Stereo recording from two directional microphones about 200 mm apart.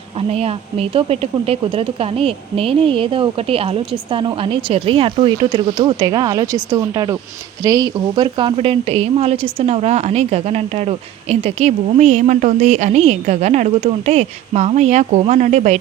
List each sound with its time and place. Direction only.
0.3 s a woman's voice: 30° right (ahead or behind)